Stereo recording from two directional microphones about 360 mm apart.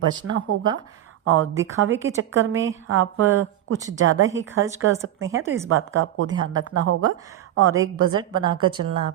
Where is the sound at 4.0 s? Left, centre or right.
Right.